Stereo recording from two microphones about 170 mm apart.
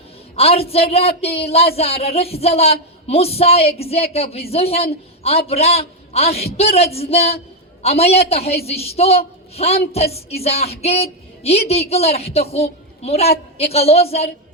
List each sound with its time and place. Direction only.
0.3 s a man's voice: 35° left (ahead or behind)